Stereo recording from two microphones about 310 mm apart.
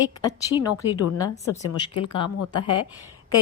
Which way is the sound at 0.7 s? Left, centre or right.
Left.